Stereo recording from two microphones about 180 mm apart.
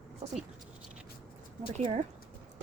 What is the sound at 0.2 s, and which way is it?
Speech, 30° right (ahead or behind).